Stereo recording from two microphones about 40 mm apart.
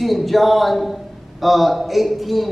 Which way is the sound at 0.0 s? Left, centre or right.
Centre.